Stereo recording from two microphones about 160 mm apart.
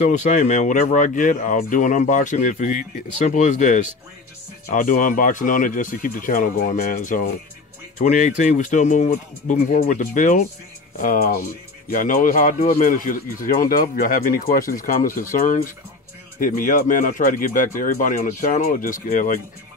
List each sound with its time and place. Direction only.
0.0 s speech: 45° left (ahead or behind)